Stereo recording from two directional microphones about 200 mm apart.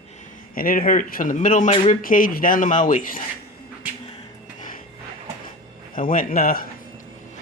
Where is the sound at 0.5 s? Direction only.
45° left (ahead or behind).